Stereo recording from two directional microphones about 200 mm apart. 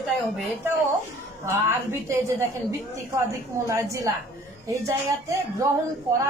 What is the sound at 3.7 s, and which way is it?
A woman's voice, 15° right (ahead or behind).